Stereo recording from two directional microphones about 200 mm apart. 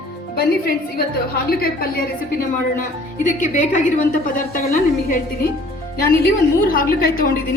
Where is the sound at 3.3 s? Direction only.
35° left (ahead or behind).